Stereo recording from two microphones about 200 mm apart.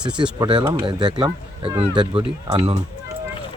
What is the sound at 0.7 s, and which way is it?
Speech, 25° right (ahead or behind).